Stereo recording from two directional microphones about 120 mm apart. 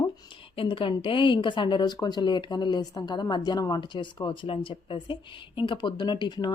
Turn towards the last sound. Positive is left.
turn(degrees=40)  # may be behind; listen again after turning